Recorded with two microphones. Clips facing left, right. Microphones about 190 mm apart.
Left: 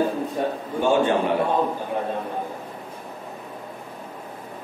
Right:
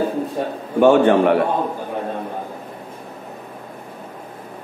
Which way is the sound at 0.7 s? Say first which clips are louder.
Right 8 dB; 65° right (ahead or behind).